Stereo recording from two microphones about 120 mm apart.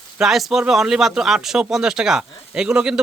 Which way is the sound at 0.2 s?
Centre (ahead or behind).